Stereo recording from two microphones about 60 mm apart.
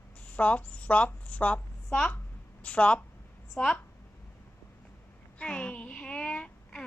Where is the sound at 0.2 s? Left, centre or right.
Left.